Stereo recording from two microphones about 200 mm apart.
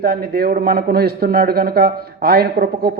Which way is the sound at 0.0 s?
50° right (ahead or behind).